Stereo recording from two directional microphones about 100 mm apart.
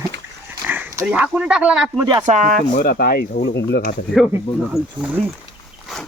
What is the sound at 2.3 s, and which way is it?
Speech, 90° right.